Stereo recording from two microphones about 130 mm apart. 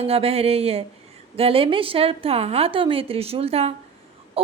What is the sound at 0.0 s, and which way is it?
A woman's voice, 50° right (ahead or behind).